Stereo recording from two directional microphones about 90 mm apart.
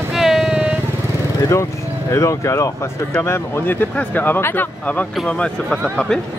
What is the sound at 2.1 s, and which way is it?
Speech, 35° left (ahead or behind).